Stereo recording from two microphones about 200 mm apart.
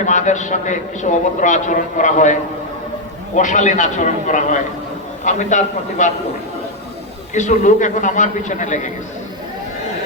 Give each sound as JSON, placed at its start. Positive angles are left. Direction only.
{"t": 0.0, "sound": "a man's voice", "side_deg": 40}
{"t": 7.3, "sound": "a man's voice", "side_deg": 40}